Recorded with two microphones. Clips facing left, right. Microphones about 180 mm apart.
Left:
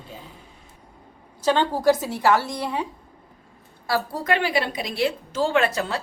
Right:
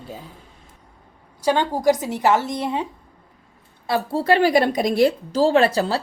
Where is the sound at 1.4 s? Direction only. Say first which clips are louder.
Right 1 dB; 10° right (ahead or behind).